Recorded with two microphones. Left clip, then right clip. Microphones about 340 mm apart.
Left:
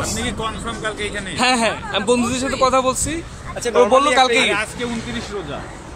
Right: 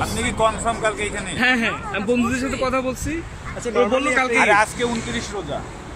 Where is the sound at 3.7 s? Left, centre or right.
Left.